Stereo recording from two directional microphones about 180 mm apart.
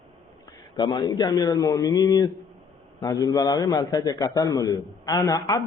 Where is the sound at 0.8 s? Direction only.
25° left (ahead or behind).